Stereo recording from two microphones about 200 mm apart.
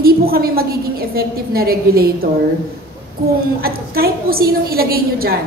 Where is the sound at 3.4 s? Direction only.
50° right (ahead or behind).